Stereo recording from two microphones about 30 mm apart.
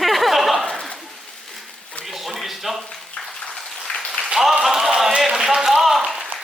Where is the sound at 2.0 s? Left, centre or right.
Centre.